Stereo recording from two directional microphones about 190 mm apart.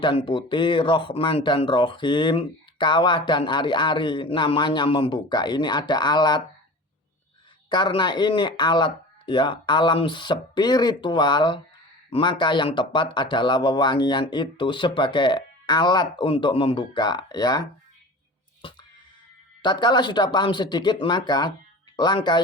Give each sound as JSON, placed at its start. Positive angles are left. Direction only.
{"t": 0.0, "sound": "speech", "side_deg": 25}
{"t": 7.7, "sound": "speech", "side_deg": 25}
{"t": 18.6, "sound": "music", "side_deg": 25}
{"t": 19.6, "sound": "speech", "side_deg": 25}